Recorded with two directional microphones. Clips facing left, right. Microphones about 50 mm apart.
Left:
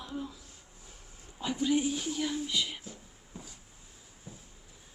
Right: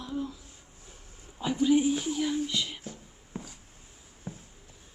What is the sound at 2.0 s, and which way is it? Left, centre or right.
Speech, centre.